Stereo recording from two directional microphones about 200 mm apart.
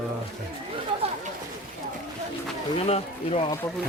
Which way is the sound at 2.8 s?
30° left (ahead or behind).